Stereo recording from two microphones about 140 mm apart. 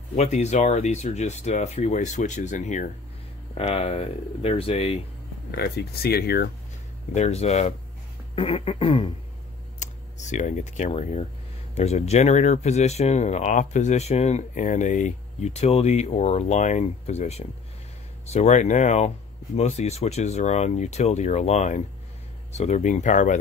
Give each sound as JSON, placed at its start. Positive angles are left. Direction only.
{"t": 0.1, "sound": "speech", "side_deg": 55}
{"t": 3.5, "sound": "speech", "side_deg": 45}
{"t": 5.6, "sound": "speech", "side_deg": 90}
{"t": 7.2, "sound": "speech", "side_deg": 50}
{"t": 8.4, "sound": "a sound", "side_deg": 40}
{"t": 9.8, "sound": "speech", "side_deg": 60}